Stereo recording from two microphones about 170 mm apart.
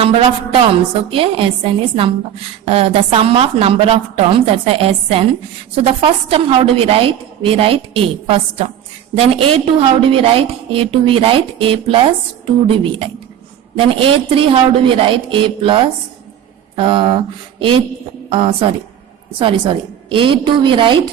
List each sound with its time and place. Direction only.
0.0 s a woman's voice: 35° right (ahead or behind)
13.7 s a woman's voice: 30° right (ahead or behind)